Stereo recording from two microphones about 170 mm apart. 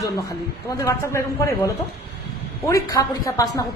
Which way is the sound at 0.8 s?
15° left (ahead or behind).